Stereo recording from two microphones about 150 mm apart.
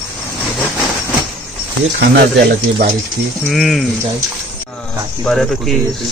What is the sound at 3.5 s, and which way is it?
Speech, centre (ahead or behind).